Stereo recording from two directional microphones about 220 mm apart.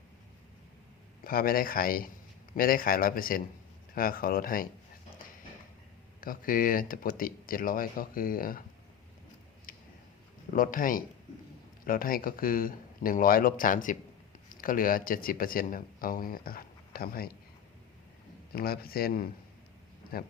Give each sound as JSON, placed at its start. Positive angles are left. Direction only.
{"t": 1.2, "sound": "speech", "side_deg": 40}
{"t": 6.1, "sound": "speech", "side_deg": 40}
{"t": 9.7, "sound": "a sound", "side_deg": 40}
{"t": 10.5, "sound": "speech", "side_deg": 40}
{"t": 18.5, "sound": "speech", "side_deg": 45}